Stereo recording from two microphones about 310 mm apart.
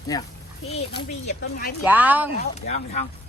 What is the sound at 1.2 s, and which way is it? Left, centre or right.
Speech, left.